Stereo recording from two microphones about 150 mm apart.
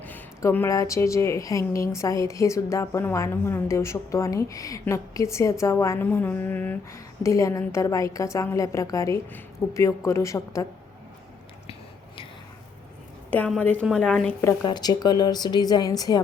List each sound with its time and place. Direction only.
0.0 s a woman's voice: 10° left (ahead or behind)
13.8 s a woman's voice: centre (ahead or behind)
14.4 s a woman's voice: 25° left (ahead or behind)